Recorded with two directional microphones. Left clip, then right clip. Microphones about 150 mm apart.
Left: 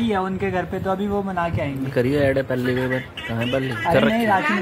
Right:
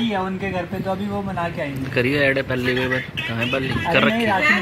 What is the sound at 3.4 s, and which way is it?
Speech, centre (ahead or behind).